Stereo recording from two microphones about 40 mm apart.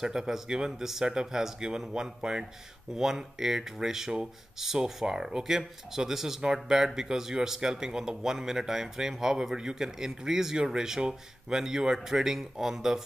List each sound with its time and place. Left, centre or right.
0.0 s speech: centre